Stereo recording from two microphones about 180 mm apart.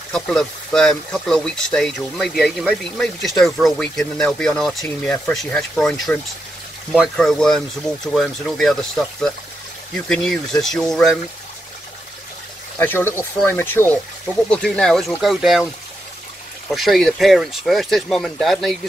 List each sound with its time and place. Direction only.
0.1 s speech: 5° left (ahead or behind)
12.7 s speech: 10° left (ahead or behind)